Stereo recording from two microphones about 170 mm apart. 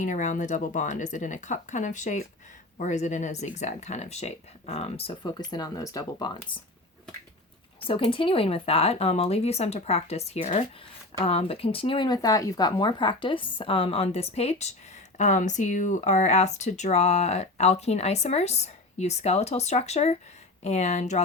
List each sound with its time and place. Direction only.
0.0 s speech: 45° left (ahead or behind); by 6.6 s 25° left (ahead or behind)
7.8 s speech: 30° left (ahead or behind)